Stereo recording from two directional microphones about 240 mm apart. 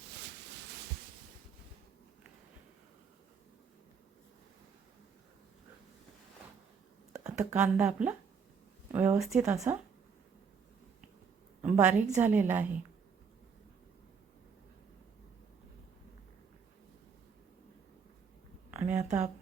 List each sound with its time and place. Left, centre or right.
7.3 s a woman's voice: centre
11.6 s a woman's voice: centre
18.7 s a sound: centre